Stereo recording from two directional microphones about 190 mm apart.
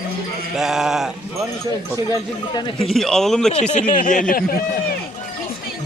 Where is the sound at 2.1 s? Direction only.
20° left (ahead or behind).